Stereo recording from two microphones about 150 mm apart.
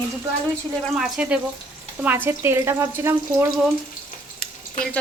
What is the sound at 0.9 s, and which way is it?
Speech, 5° right (ahead or behind).